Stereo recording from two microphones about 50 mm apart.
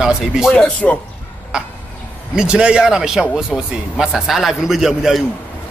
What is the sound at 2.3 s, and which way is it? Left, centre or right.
Speech, centre.